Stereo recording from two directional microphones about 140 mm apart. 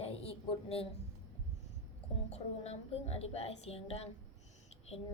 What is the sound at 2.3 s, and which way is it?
Speech, 45° left (ahead or behind).